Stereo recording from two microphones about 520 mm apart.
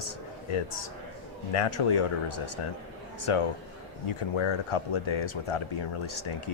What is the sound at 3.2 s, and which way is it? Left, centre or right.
A man's voice, left.